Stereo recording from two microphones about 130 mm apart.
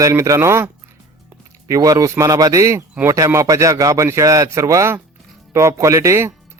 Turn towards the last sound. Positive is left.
turn(degrees=-20)  # may be behind; listen again after turning